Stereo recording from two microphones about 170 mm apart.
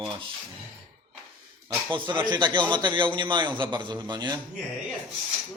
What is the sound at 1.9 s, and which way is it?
A man's voice, 30° right (ahead or behind).